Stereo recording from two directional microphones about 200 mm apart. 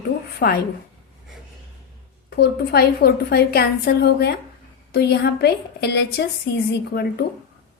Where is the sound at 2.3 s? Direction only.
50° left (ahead or behind).